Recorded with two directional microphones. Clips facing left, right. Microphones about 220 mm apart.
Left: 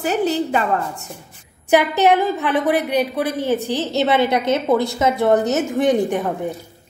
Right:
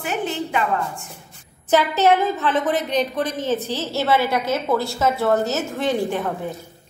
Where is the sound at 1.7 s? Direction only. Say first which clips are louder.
Left 2 dB; 15° left (ahead or behind).